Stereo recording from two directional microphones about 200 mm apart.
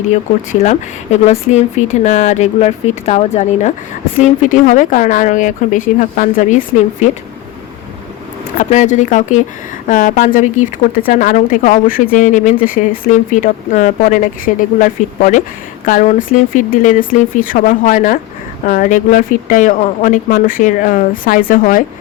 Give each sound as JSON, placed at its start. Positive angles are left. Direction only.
{"t": 0.6, "sound": "speech", "side_deg": 35}
{"t": 8.5, "sound": "speech", "side_deg": 35}